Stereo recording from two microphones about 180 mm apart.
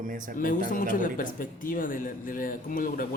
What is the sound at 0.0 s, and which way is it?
Speech, 50° right (ahead or behind).